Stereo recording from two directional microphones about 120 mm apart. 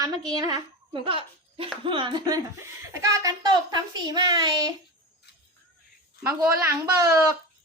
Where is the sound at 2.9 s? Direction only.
25° right (ahead or behind).